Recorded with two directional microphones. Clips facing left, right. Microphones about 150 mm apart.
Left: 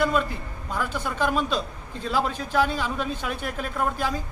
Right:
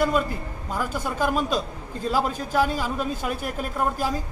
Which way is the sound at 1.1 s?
5° right (ahead or behind).